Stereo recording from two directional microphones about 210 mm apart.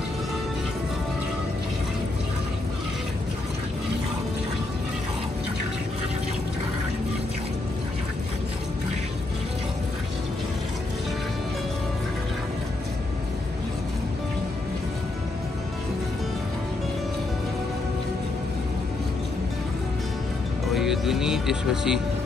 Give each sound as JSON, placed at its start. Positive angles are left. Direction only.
{"t": 20.7, "sound": "music", "side_deg": 0}